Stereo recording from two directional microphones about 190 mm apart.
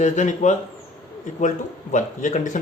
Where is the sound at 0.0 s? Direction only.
40° left (ahead or behind).